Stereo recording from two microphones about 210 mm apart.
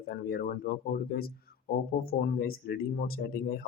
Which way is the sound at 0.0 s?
45° left (ahead or behind).